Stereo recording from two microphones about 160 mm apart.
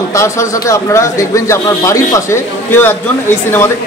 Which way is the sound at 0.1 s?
20° left (ahead or behind).